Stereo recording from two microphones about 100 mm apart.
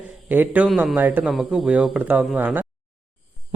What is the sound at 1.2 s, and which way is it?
A man's voice, 5° right (ahead or behind).